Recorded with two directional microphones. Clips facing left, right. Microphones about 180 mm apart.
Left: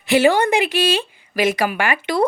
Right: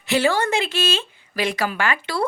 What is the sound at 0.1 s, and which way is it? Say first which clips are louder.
Speech: left 5 dB; 15° left (ahead or behind).